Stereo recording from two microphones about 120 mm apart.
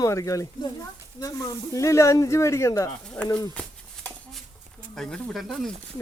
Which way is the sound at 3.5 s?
5° left (ahead or behind).